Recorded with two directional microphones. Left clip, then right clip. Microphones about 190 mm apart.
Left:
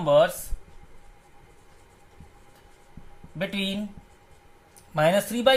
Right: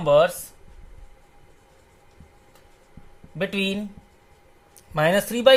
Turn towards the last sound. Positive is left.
turn(degrees=-50)  # may be behind; listen again after turning